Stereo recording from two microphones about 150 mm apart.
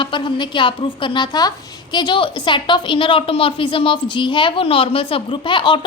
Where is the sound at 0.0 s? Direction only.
35° left (ahead or behind).